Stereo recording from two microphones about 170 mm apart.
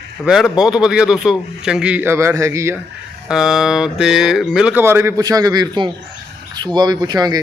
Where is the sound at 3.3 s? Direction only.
5° right (ahead or behind).